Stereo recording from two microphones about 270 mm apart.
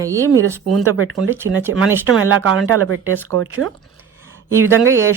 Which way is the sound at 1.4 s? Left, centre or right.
Right.